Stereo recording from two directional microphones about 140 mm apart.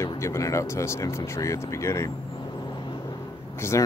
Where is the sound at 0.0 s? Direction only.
20° left (ahead or behind).